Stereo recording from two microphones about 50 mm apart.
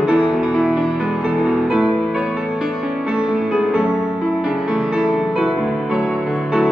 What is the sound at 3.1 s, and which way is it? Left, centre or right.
Music, centre.